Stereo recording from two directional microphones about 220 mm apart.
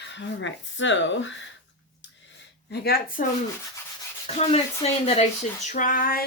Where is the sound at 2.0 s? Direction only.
55° left (ahead or behind).